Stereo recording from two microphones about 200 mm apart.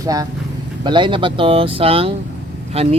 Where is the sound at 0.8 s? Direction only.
25° right (ahead or behind).